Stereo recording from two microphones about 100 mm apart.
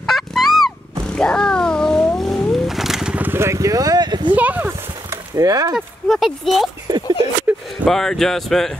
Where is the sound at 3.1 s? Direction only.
20° right (ahead or behind); by 4.3 s 45° right (ahead or behind).